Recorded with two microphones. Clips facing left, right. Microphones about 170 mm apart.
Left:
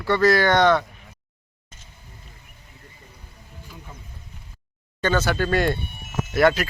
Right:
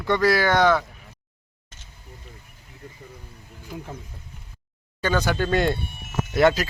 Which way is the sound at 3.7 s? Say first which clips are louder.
Right 10 dB; 55° right (ahead or behind).